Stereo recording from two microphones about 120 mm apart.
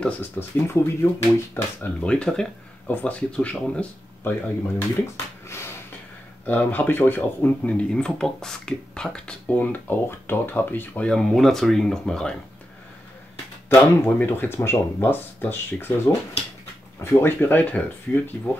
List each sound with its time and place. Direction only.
0.0 s speech: 15° left (ahead or behind)
5.5 s a sound: 20° left (ahead or behind)
6.4 s speech: 15° left (ahead or behind)
13.7 s speech: 15° left (ahead or behind)